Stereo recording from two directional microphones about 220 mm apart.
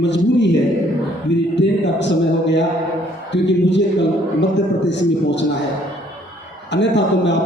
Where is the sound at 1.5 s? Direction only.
55° left (ahead or behind).